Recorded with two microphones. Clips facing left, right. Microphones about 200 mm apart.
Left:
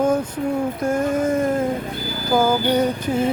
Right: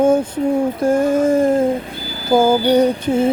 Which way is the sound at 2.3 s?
25° right (ahead or behind).